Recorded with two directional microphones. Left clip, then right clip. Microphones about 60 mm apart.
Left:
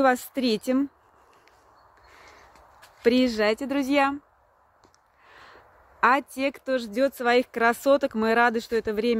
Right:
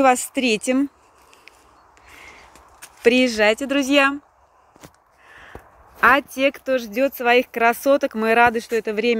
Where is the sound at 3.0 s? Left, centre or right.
Left.